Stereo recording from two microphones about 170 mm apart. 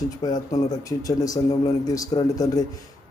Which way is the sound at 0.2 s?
25° left (ahead or behind).